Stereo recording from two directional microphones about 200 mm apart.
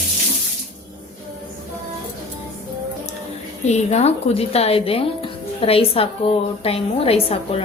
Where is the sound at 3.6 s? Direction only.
35° left (ahead or behind).